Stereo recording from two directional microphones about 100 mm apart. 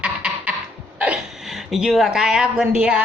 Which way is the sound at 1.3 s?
5° right (ahead or behind).